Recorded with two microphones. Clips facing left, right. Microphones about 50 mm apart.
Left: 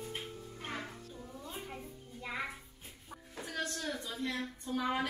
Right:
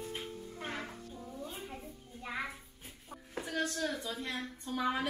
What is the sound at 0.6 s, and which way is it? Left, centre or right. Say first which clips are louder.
Music: right 1 dB; centre.